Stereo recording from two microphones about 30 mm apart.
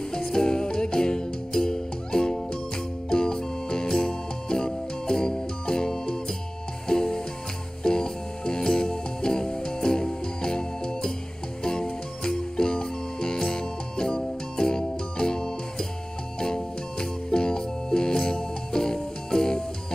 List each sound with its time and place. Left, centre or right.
0.1 s music: left